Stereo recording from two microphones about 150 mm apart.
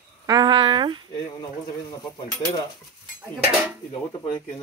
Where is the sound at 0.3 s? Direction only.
30° right (ahead or behind).